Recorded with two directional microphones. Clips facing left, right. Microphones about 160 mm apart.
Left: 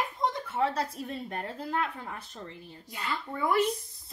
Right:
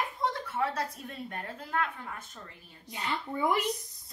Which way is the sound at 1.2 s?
35° left (ahead or behind).